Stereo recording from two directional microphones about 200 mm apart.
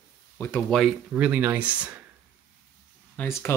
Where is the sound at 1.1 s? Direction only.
10° right (ahead or behind).